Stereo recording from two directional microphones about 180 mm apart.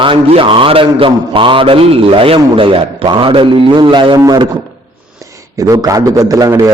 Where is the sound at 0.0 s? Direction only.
30° right (ahead or behind).